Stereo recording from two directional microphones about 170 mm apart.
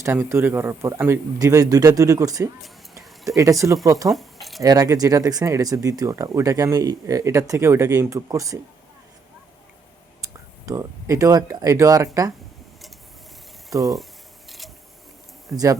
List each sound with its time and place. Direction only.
0.0 s speech: 15° right (ahead or behind)
4.1 s keys jangling: centre (ahead or behind)
4.6 s speech: 20° right (ahead or behind)
10.7 s speech: 20° right (ahead or behind)
13.7 s speech: 20° right (ahead or behind)
15.5 s speech: centre (ahead or behind)